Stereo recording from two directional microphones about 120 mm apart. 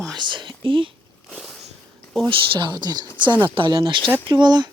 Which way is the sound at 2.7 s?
35° right (ahead or behind).